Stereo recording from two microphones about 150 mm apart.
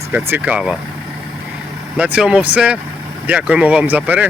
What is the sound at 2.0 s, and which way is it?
Speech, 5° right (ahead or behind).